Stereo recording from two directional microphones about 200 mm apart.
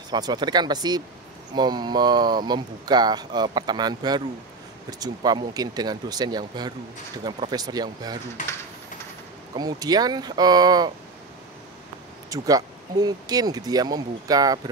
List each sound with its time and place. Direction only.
0.1 s speech: 20° right (ahead or behind)
9.6 s speech: 20° right (ahead or behind)
12.3 s speech: 20° right (ahead or behind)